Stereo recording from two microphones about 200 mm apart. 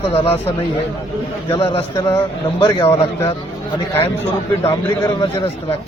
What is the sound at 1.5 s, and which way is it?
Speech, 25° left (ahead or behind).